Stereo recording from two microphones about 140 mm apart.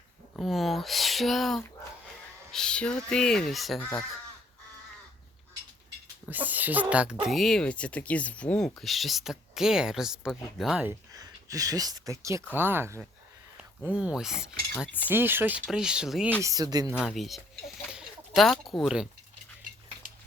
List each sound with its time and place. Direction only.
0.3 s speech: centre (ahead or behind)
6.2 s speech: 10° right (ahead or behind)
11.1 s speech: 25° right (ahead or behind); by 14.5 s 5° right (ahead or behind)
15.1 s speech: 15° right (ahead or behind)
16.4 s speech: 25° right (ahead or behind)
17.0 s speech: centre (ahead or behind)